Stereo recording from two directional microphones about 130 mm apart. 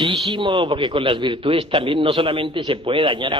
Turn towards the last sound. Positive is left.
turn(degrees=-35)  # may be behind; listen again after turning